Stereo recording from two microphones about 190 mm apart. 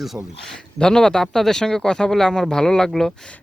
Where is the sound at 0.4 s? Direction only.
5° left (ahead or behind).